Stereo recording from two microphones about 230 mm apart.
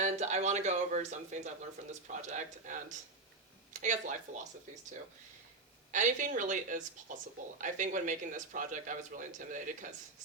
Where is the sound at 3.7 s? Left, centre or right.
Right.